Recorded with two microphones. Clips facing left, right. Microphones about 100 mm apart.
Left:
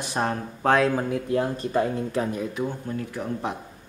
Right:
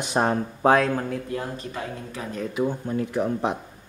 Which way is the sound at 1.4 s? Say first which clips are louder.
Left 8 dB; 40° left (ahead or behind).